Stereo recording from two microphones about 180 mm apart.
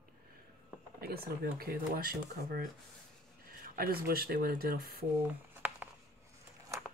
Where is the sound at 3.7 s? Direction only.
55° right (ahead or behind).